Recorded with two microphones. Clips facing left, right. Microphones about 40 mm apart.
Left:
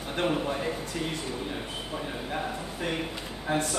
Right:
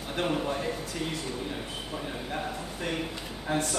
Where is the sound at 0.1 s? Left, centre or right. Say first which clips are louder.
Left 1 dB; centre.